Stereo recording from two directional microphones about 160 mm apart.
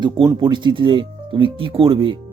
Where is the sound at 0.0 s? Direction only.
30° right (ahead or behind).